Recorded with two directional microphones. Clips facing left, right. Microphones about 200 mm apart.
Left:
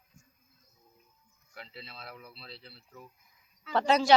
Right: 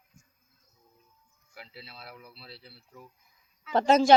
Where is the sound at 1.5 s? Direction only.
5° right (ahead or behind).